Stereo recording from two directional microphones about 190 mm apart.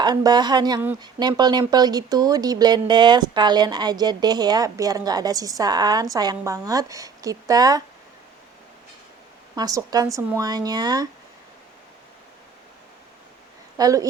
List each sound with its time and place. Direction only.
0.0 s speech: 20° right (ahead or behind)
9.6 s speech: 20° right (ahead or behind)
13.7 s speech: 20° right (ahead or behind)